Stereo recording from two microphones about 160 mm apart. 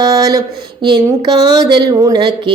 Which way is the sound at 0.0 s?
25° right (ahead or behind).